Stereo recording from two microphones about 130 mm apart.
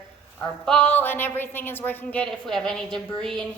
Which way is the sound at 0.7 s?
10° left (ahead or behind).